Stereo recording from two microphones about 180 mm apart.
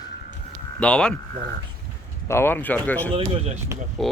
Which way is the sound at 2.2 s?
15° left (ahead or behind).